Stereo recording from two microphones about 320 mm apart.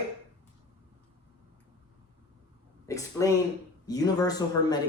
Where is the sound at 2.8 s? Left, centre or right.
Centre.